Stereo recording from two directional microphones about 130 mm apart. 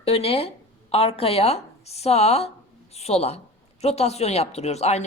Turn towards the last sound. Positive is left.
turn(degrees=55)  # may be behind; listen again after turning